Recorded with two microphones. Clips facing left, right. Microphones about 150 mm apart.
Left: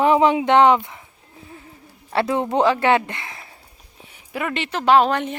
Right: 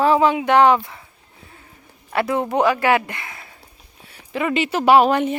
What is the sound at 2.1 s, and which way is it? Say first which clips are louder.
Speech: even; 25° left (ahead or behind).